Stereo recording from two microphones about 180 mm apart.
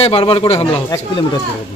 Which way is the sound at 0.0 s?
30° left (ahead or behind).